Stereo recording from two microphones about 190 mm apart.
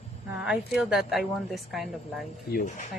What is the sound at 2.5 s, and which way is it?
Speech, 45° left (ahead or behind).